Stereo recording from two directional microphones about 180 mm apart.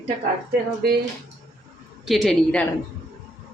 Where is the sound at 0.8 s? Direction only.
60° right (ahead or behind).